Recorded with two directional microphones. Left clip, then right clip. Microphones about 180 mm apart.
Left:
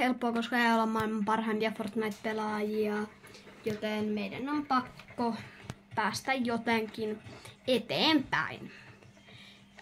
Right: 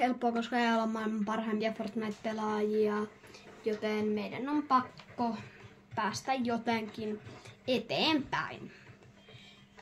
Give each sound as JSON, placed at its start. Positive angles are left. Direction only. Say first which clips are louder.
{"t": 0.0, "sound": "speech", "louder": "even", "side_deg": 30}
{"t": 5.1, "sound": "speech", "louder": "left 2 dB", "side_deg": 40}